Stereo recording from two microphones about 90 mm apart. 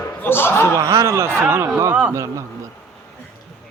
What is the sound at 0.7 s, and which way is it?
Speech, 35° right (ahead or behind).